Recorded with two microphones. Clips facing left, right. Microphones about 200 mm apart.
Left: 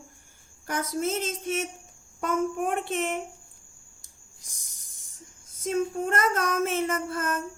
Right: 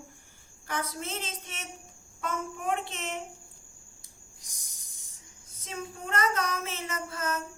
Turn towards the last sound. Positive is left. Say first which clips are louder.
# left 6 dB
turn(degrees=50)  # may be behind; listen again after turning